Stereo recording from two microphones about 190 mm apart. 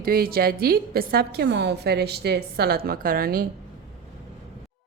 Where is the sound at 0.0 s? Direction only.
50° right (ahead or behind).